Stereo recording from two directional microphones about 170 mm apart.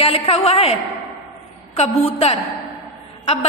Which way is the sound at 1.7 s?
35° left (ahead or behind).